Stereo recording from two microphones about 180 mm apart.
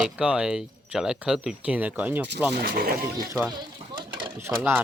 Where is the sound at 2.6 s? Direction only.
55° right (ahead or behind).